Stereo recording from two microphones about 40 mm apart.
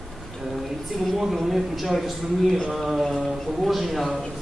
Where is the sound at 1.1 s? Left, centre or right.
Centre.